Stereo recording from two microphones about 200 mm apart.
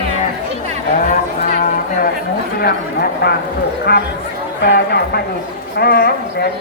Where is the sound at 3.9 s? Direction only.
50° left (ahead or behind).